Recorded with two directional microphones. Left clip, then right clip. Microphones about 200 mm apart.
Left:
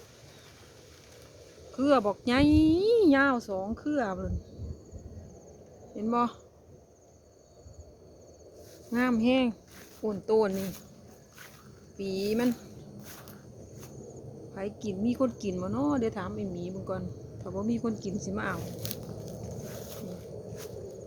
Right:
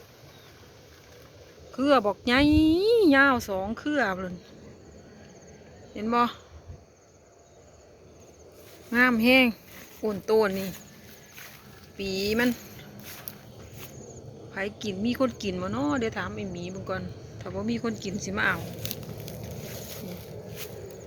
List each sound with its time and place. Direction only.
1.7 s speech: centre (ahead or behind)
5.9 s speech: centre (ahead or behind)
8.9 s speech: centre (ahead or behind)
11.9 s a sound: centre (ahead or behind)
14.5 s speech: centre (ahead or behind)
15.9 s insect: 10° left (ahead or behind)
16.8 s speech: 10° left (ahead or behind)
18.5 s a sound: 10° right (ahead or behind)